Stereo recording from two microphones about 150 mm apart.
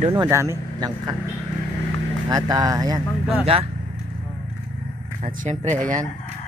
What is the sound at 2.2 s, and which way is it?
Speech, 25° right (ahead or behind).